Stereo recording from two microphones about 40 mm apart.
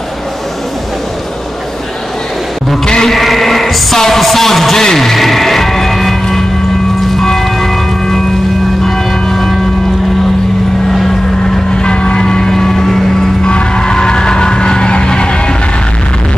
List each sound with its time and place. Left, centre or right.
2.8 s music: centre
3.1 s music: centre
4.0 s speech: centre
4.8 s music: centre
7.0 s train: centre
8.8 s music: centre
10.9 s vehicle: centre